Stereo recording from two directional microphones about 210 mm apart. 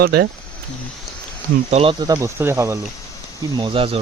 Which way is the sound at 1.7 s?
25° right (ahead or behind).